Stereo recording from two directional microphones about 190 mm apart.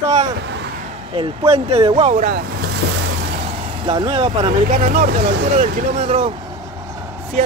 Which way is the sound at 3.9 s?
25° right (ahead or behind).